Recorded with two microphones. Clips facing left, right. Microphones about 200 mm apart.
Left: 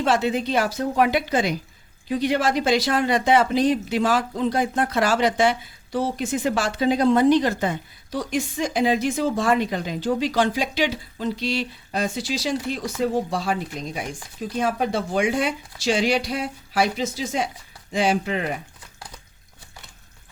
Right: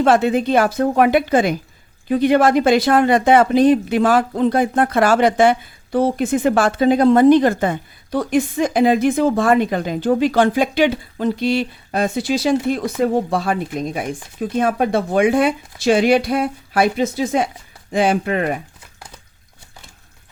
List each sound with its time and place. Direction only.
0.0 s speech: 55° right (ahead or behind)